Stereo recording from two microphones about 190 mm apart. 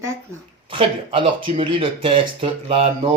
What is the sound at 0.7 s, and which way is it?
Speech, 25° right (ahead or behind).